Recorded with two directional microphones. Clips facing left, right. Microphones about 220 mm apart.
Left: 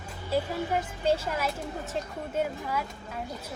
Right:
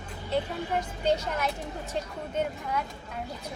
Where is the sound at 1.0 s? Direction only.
5° left (ahead or behind).